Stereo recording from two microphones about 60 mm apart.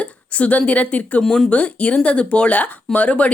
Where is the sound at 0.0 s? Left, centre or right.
Left.